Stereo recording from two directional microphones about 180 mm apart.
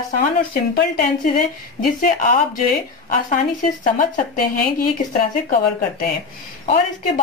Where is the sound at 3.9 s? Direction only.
50° left (ahead or behind).